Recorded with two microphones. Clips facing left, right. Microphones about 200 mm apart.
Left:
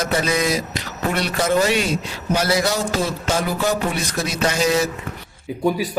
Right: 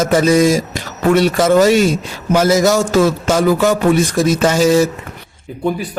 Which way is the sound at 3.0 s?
90° right.